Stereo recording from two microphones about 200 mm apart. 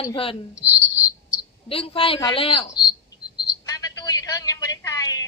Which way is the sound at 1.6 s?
30° left (ahead or behind).